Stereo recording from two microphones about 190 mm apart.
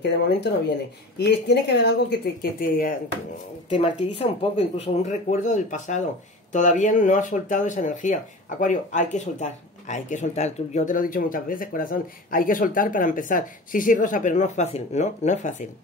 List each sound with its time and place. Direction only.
1.1 s a woman's voice: 60° left (ahead or behind)
3.7 s speech: 30° left (ahead or behind)